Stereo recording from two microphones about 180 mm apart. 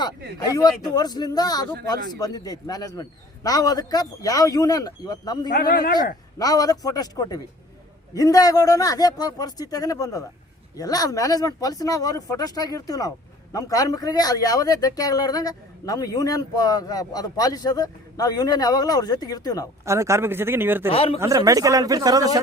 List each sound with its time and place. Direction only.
0.4 s speech: 20° left (ahead or behind)
5.5 s speech: 55° left (ahead or behind)
6.4 s speech: 20° left (ahead or behind)
19.8 s speech: 15° right (ahead or behind)
20.9 s speech: 30° left (ahead or behind)
21.2 s a man's voice: 20° right (ahead or behind)